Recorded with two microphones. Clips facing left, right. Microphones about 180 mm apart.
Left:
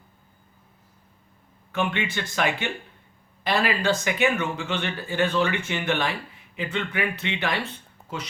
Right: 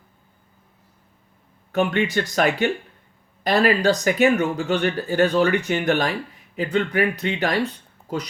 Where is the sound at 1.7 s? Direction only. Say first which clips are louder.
Right 6 dB; 40° right (ahead or behind).